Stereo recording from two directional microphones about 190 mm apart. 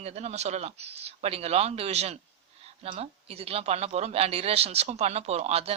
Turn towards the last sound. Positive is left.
turn(degrees=-35)  # may be behind; listen again after turning